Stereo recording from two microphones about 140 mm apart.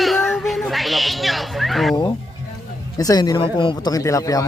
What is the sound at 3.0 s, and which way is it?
Speech, 25° left (ahead or behind).